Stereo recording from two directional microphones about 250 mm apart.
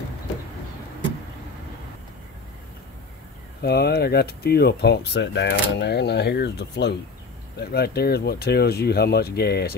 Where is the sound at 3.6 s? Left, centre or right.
Left.